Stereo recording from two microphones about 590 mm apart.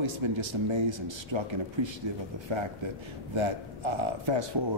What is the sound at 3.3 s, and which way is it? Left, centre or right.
Speech, right.